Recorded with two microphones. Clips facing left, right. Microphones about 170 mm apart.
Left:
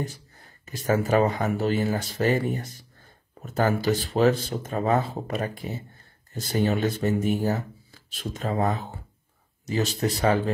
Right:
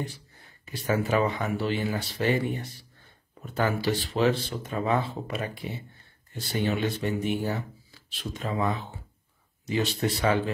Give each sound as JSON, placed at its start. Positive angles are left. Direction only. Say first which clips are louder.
{"t": 0.0, "sound": "a man's voice", "louder": "left 3 dB", "side_deg": 45}